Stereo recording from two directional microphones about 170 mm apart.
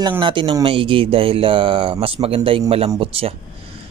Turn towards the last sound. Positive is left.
turn(degrees=-35)  # may be behind; listen again after turning